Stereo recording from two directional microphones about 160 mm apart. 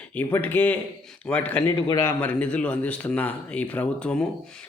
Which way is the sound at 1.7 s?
25° left (ahead or behind).